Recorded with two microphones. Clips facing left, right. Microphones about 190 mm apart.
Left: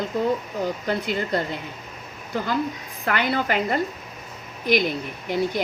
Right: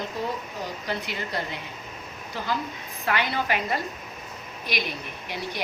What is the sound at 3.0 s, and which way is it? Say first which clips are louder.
Speech: left 3 dB; 50° left (ahead or behind).